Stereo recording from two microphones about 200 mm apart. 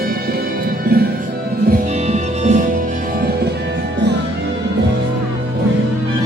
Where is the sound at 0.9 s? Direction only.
50° right (ahead or behind).